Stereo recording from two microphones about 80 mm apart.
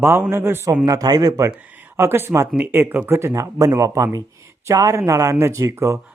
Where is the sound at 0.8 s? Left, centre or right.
Right.